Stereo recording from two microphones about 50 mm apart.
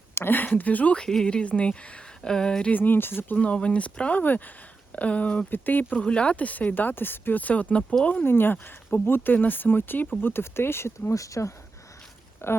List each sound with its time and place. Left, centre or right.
0.3 s speech: left
0.9 s speech: centre
2.7 s speech: left
3.3 s speech: left
4.2 s speech: left
4.9 s speech: left
5.5 s speech: left
6.0 s speech: left
7.4 s speech: left
8.2 s speech: left
12.4 s speech: left